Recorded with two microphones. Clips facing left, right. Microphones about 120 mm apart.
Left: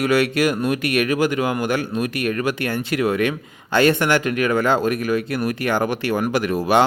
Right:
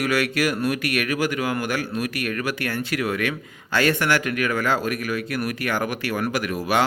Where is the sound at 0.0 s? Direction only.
25° left (ahead or behind).